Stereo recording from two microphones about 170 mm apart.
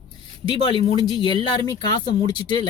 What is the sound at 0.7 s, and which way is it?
Speech, 30° left (ahead or behind).